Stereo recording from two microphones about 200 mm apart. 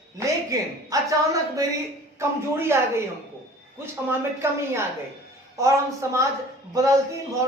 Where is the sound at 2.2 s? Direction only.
15° right (ahead or behind).